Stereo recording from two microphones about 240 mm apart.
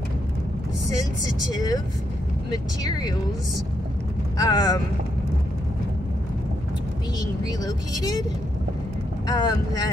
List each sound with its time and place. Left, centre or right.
1.5 s speech: centre
2.8 s speech: centre
4.4 s speech: centre
7.2 s speech: centre
9.3 s speech: centre